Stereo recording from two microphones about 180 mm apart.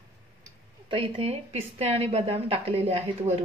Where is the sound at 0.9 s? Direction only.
35° right (ahead or behind).